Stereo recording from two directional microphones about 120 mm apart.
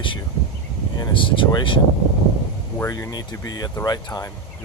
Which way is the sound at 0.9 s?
40° left (ahead or behind).